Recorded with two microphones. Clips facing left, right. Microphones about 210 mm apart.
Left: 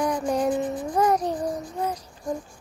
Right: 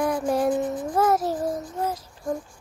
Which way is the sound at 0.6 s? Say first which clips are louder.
Even; 15° left (ahead or behind).